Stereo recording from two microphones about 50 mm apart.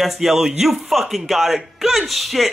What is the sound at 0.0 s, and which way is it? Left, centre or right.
Speech, centre.